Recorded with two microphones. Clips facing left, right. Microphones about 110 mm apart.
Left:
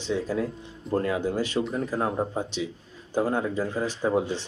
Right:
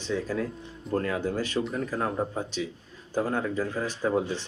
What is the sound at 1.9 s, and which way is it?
A man's voice, 15° left (ahead or behind).